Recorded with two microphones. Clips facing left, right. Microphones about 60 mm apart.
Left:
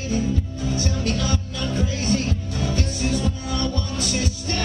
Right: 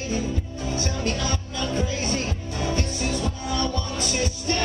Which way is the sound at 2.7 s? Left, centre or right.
Centre.